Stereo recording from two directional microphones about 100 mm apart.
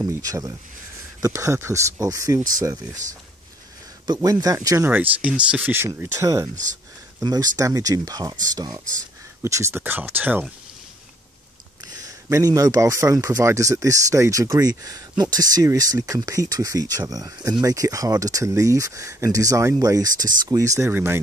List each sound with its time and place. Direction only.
0.2 s speech: 35° right (ahead or behind)
4.1 s speech: 40° right (ahead or behind)
4.8 s speech: 15° right (ahead or behind)
6.0 s speech: 35° right (ahead or behind)
9.4 s speech: 25° right (ahead or behind)
12.0 s speech: 35° right (ahead or behind)